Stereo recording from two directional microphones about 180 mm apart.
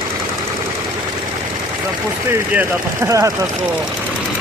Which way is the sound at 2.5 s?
15° right (ahead or behind).